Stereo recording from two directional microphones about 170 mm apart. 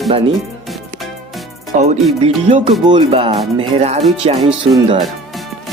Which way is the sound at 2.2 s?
35° right (ahead or behind).